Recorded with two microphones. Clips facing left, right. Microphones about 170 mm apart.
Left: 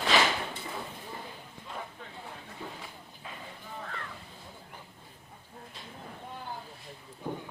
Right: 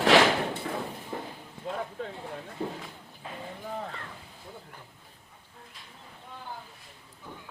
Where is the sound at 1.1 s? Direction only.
60° right (ahead or behind).